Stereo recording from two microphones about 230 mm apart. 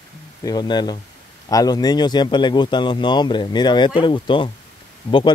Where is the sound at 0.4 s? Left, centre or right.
Centre.